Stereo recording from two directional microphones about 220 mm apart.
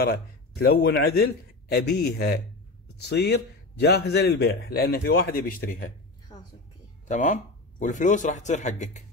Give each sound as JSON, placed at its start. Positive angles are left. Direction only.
{"t": 0.0, "sound": "a man's voice", "side_deg": 45}
{"t": 7.1, "sound": "a man's voice", "side_deg": 35}